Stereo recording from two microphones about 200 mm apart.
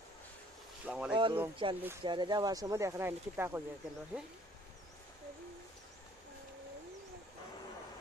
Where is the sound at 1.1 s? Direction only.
25° right (ahead or behind); by 4.3 s 5° right (ahead or behind).